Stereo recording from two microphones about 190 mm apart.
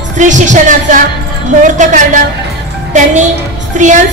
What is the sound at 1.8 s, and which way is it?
Speech, 40° right (ahead or behind).